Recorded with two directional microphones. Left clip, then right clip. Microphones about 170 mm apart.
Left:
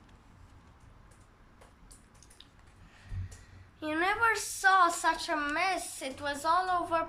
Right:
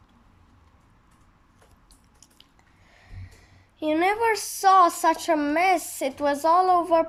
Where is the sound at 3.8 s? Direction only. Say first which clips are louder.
Right 6 dB; 30° right (ahead or behind).